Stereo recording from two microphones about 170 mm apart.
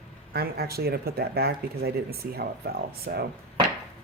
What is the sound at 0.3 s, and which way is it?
Speech, 65° right (ahead or behind).